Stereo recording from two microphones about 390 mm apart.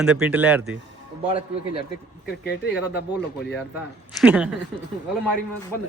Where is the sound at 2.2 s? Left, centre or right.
Left.